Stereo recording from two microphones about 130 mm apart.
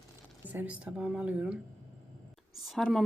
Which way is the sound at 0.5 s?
10° right (ahead or behind).